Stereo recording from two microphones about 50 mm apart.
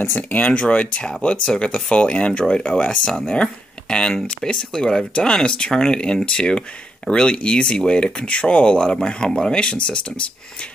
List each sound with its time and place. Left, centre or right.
0.0 s speech: left
0.4 s speech: left
4.5 s speech: centre